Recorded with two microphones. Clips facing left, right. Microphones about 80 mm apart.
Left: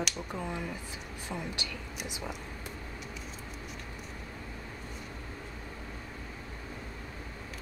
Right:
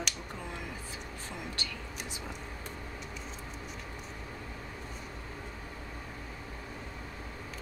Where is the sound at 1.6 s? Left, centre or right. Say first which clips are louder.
Left 1 dB; centre.